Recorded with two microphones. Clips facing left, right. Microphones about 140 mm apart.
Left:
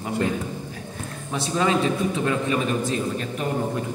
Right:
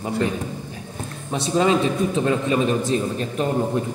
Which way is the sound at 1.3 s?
20° right (ahead or behind).